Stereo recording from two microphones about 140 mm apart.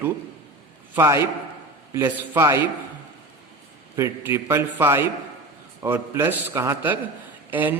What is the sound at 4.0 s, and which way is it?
A man's voice, 15° right (ahead or behind).